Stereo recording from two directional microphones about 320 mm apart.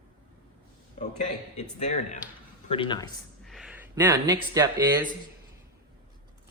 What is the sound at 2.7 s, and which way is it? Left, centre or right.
Speech, centre.